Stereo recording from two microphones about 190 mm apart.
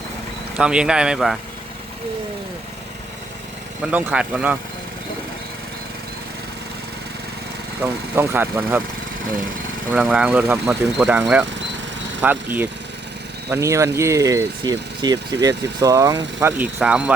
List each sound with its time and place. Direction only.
0.5 s speech: 5° right (ahead or behind)
3.9 s speech: 5° right (ahead or behind)
7.8 s speech: 10° right (ahead or behind)
9.9 s speech: 5° right (ahead or behind)